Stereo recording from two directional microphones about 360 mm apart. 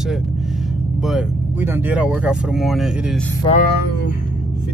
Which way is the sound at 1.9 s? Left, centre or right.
Centre.